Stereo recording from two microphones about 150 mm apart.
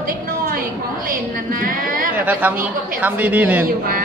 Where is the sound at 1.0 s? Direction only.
70° right (ahead or behind).